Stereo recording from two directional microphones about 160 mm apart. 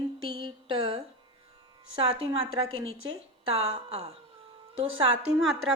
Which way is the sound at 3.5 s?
40° right (ahead or behind).